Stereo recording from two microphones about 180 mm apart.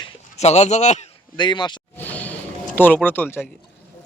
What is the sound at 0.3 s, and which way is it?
Speech, 40° left (ahead or behind).